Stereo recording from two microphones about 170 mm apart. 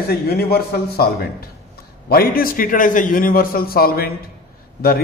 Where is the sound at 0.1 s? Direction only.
65° left (ahead or behind).